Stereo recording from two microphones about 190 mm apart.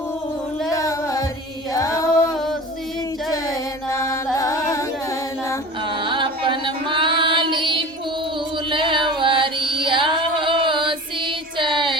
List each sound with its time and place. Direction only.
0.7 s music: 15° left (ahead or behind)
1.7 s chant: 15° left (ahead or behind)
3.3 s music: 15° left (ahead or behind)
6.0 s music: 25° right (ahead or behind)
9.8 s female singing: 25° right (ahead or behind)